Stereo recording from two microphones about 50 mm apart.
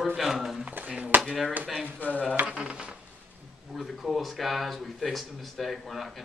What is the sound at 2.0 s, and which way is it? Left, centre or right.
Speech, left.